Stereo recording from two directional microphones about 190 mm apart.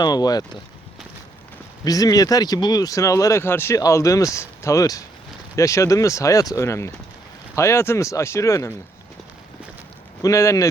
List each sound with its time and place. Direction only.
0.0 s speech: 20° left (ahead or behind)
1.8 s speech: 20° left (ahead or behind)
10.2 s speech: 15° left (ahead or behind)